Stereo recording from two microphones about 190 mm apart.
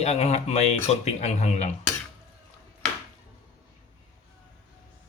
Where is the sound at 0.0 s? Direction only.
35° left (ahead or behind).